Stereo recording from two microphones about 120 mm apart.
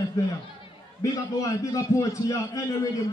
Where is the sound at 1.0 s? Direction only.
25° left (ahead or behind).